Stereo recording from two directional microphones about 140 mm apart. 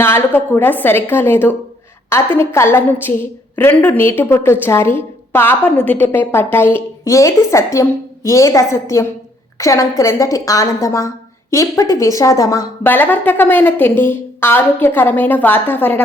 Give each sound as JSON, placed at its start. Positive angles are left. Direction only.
{"t": 0.0, "sound": "a woman's voice", "side_deg": 15}